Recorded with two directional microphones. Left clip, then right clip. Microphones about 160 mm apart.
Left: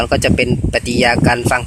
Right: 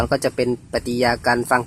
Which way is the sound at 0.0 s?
25° right (ahead or behind).